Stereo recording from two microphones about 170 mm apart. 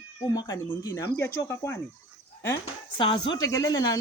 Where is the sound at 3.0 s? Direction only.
25° left (ahead or behind).